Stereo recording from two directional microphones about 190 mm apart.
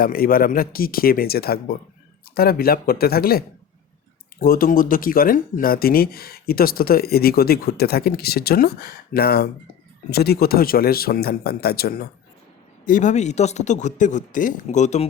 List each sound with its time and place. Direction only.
0.0 s speech: 50° left (ahead or behind)
12.8 s speech: 40° left (ahead or behind)